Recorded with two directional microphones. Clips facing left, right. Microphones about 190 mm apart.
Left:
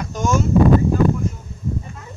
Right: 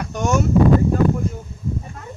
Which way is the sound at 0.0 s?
65° right (ahead or behind).